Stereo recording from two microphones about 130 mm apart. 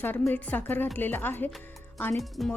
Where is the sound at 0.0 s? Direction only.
15° left (ahead or behind).